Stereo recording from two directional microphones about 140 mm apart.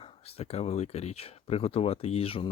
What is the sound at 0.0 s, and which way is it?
Speech, 45° left (ahead or behind).